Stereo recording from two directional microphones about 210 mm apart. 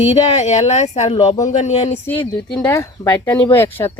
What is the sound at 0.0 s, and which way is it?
Speech, 30° left (ahead or behind).